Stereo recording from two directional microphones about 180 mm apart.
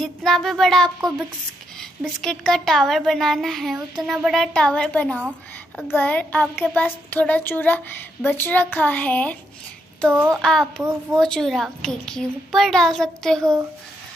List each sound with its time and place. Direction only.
0.0 s a woman's voice: centre (ahead or behind)
10.1 s a woman's voice: 10° right (ahead or behind)
10.4 s a woman's voice: centre (ahead or behind)
10.8 s a woman's voice: 15° right (ahead or behind)
11.1 s a woman's voice: centre (ahead or behind)
13.4 s a woman's voice: 15° right (ahead or behind)